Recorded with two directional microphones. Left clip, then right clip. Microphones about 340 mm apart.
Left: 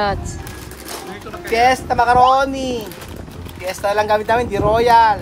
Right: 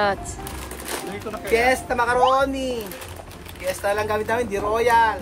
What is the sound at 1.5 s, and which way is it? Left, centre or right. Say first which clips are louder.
Speech: left 5 dB; centre.